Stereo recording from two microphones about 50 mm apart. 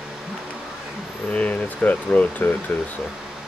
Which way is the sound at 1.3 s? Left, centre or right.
Left.